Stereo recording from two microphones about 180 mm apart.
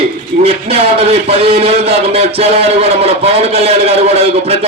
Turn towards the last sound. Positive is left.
turn(degrees=-35)  # may be behind; listen again after turning